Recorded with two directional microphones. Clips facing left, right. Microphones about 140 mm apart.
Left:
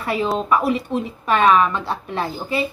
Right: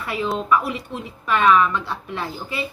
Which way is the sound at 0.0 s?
30° left (ahead or behind).